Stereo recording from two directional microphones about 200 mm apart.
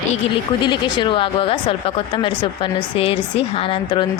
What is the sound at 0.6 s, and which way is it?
Speech, 25° left (ahead or behind).